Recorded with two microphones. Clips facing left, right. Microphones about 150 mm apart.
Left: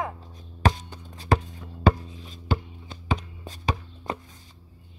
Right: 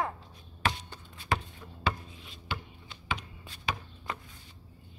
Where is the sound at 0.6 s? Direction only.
40° left (ahead or behind).